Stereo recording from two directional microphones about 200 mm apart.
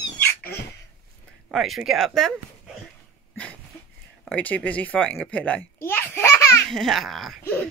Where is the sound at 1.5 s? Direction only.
Centre (ahead or behind).